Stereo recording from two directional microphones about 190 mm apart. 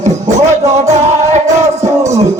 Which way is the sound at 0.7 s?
35° right (ahead or behind).